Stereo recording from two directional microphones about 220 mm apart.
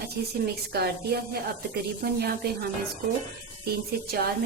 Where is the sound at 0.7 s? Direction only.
45° right (ahead or behind).